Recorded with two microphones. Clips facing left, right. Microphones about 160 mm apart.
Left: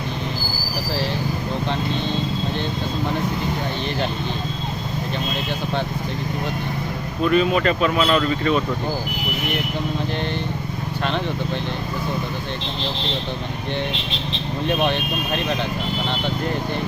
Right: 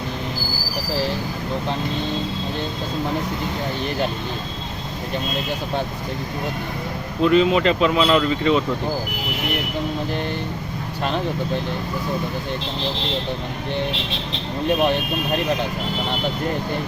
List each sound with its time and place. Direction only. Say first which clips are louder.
7.2 s speech: right 2 dB; 20° right (ahead or behind)
11.0 s speech: right 1 dB; 5° right (ahead or behind)
14.8 s speech: right 2 dB; 5° right (ahead or behind)